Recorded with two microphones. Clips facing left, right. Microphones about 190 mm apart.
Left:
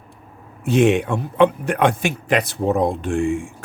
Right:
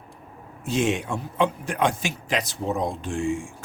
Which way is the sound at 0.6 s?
60° left (ahead or behind).